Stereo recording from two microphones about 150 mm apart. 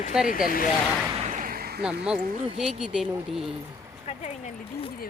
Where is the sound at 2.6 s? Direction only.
5° right (ahead or behind).